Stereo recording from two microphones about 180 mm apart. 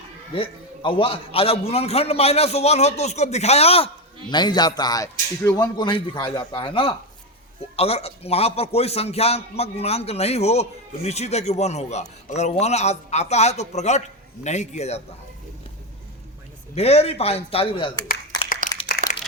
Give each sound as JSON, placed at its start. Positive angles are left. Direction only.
{"t": 0.3, "sound": "a man's voice", "side_deg": 30}
{"t": 16.7, "sound": "a man's voice", "side_deg": 35}
{"t": 18.6, "sound": "a sound", "side_deg": -45}